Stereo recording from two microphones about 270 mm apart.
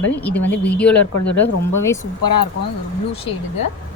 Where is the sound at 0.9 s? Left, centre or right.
Left.